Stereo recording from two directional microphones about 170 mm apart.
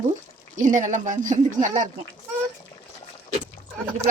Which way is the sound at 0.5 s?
50° right (ahead or behind).